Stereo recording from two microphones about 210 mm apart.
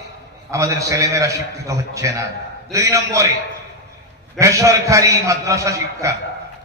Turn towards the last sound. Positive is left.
turn(degrees=-15)  # may be behind; listen again after turning